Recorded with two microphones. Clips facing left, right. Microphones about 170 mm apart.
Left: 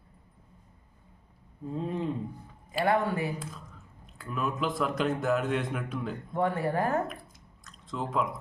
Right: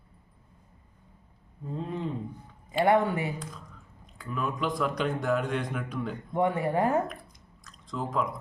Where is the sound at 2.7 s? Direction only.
25° right (ahead or behind).